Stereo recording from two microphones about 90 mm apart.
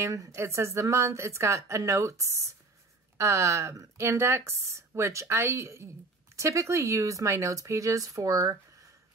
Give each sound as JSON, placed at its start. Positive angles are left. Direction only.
{"t": 0.0, "sound": "speech", "side_deg": -35}